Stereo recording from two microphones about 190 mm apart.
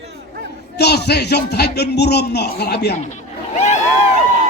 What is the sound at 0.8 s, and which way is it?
Speech, 60° left (ahead or behind).